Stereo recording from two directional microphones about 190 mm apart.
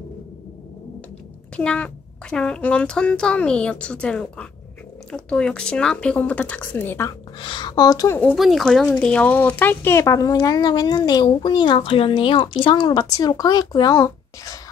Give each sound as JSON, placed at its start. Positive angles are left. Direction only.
{"t": 1.6, "sound": "a child's voice", "side_deg": 5}
{"t": 7.3, "sound": "speech", "side_deg": 25}
{"t": 8.3, "sound": "speech", "side_deg": 0}